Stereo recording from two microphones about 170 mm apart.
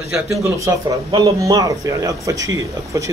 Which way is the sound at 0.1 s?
15° right (ahead or behind).